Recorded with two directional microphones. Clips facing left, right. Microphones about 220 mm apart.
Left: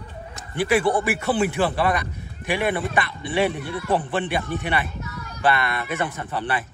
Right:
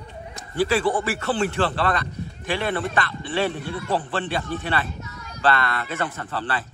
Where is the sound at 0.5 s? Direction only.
15° left (ahead or behind).